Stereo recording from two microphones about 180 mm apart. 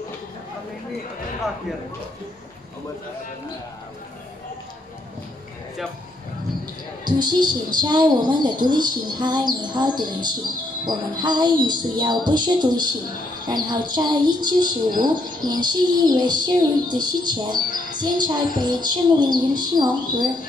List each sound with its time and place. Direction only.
7.1 s speech: 25° right (ahead or behind)